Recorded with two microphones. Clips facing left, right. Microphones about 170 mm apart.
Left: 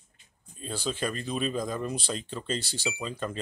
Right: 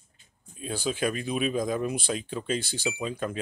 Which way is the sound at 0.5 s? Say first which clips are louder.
Right 3 dB; 10° right (ahead or behind).